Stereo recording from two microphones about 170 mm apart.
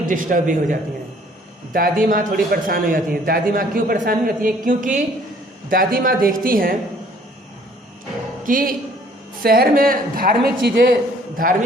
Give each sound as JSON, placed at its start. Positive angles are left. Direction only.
{"t": 0.0, "sound": "a man's voice", "side_deg": -55}
{"t": 8.4, "sound": "a man's voice", "side_deg": -55}